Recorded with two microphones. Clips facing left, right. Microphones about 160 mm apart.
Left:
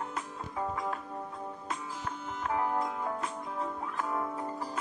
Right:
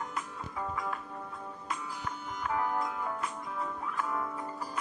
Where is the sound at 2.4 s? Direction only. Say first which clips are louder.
Left 1 dB; 25° left (ahead or behind).